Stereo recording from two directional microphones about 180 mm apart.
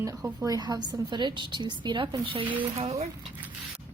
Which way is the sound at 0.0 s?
20° right (ahead or behind).